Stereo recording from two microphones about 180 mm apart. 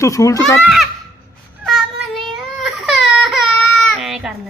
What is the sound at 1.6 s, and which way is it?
Child singing, centre (ahead or behind).